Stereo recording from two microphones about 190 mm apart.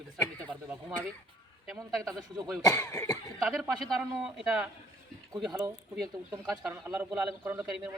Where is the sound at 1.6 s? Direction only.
5° right (ahead or behind).